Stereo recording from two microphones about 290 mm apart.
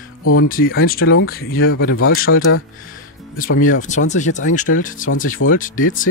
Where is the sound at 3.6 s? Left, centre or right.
Left.